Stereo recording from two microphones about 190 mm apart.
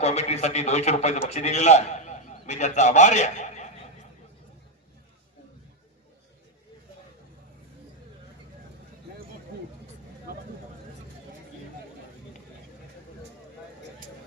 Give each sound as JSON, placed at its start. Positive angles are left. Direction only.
{"t": 0.0, "sound": "a man's voice", "side_deg": 35}